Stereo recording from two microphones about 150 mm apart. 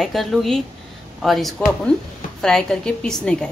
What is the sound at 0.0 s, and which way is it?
A woman's voice, centre (ahead or behind).